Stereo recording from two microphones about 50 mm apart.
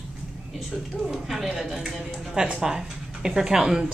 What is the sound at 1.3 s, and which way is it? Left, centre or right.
A man's voice, centre.